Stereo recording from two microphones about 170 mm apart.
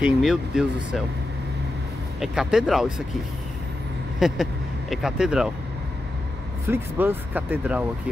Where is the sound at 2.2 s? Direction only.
5° right (ahead or behind).